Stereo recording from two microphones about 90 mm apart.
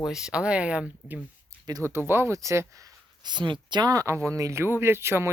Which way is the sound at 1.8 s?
25° right (ahead or behind).